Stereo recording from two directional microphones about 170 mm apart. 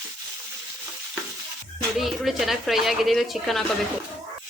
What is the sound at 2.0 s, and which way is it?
Speech, centre (ahead or behind).